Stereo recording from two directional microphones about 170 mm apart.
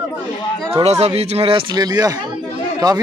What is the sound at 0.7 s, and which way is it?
Speech, 40° right (ahead or behind).